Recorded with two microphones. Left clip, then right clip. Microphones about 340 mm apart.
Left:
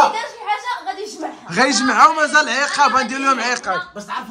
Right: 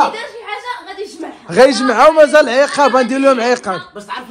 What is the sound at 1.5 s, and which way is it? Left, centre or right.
A man's voice, centre.